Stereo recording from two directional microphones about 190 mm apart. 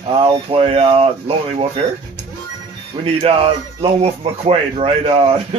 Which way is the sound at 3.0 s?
30° right (ahead or behind).